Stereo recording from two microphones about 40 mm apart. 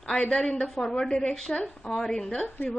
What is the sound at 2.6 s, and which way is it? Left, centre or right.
Speech, left.